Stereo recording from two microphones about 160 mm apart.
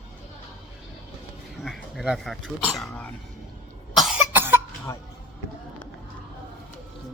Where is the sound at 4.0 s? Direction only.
Centre (ahead or behind).